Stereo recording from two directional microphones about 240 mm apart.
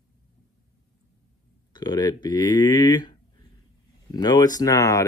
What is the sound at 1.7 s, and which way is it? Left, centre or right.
Speech, centre.